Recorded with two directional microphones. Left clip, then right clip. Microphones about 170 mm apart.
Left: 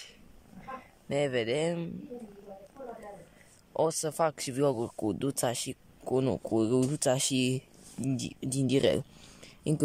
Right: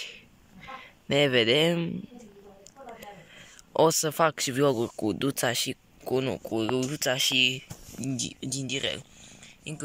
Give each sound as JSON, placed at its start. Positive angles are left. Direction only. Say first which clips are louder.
{"t": 0.0, "sound": "a sound", "louder": "right 10 dB", "side_deg": 5}
{"t": 3.7, "sound": "speech", "louder": "right 6 dB", "side_deg": 0}
{"t": 8.0, "sound": "speech", "louder": "right 1 dB", "side_deg": 10}
{"t": 8.6, "sound": "speech", "louder": "left 6 dB", "side_deg": 30}